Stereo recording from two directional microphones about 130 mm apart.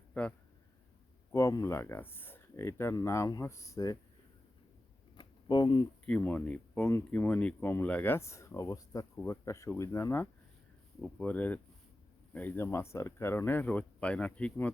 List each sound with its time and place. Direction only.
0.1 s speech: 10° left (ahead or behind)
1.3 s speech: 25° left (ahead or behind)
5.1 s a sound: 35° left (ahead or behind)
6.1 s speech: 10° left (ahead or behind)